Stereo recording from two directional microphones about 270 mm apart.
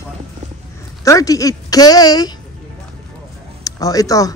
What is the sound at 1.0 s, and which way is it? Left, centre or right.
Speech, centre.